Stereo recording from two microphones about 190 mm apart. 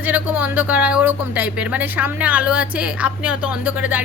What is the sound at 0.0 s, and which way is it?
A woman's voice, 10° right (ahead or behind).